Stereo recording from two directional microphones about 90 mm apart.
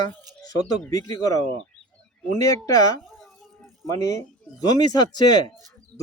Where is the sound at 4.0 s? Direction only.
35° left (ahead or behind).